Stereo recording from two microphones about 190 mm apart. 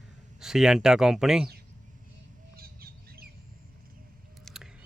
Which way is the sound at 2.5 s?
55° right (ahead or behind).